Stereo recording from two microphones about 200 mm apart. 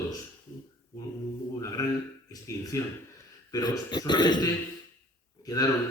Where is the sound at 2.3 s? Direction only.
15° left (ahead or behind).